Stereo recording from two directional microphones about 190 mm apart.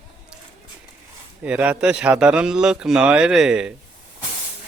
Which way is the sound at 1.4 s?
5° right (ahead or behind).